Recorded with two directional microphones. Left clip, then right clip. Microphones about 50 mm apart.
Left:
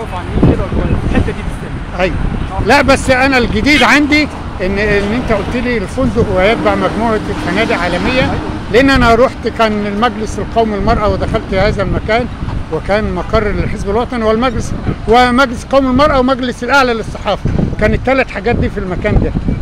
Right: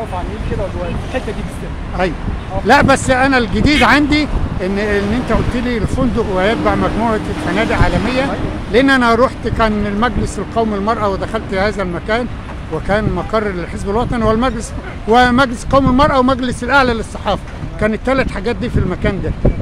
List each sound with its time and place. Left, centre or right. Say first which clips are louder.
2.6 s speech: left 1 dB; right
15.0 s speech: left 2 dB; right
17.7 s speech: left 3 dB; centre
18.0 s speech: left 4 dB; right